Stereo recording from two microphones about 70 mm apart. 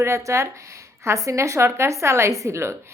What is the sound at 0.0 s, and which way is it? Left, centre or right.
A woman's voice, right.